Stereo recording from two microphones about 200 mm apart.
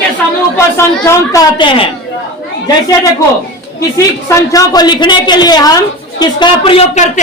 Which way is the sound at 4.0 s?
15° left (ahead or behind).